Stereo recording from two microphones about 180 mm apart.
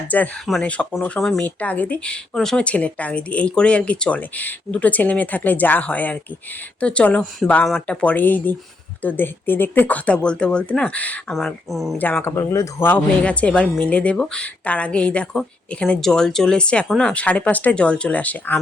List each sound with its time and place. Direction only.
0.1 s speech: 5° left (ahead or behind)